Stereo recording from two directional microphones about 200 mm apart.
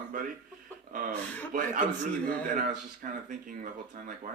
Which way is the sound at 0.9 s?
40° right (ahead or behind).